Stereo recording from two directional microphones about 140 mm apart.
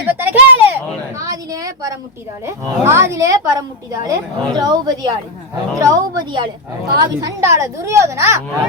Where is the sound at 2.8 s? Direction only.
20° right (ahead or behind).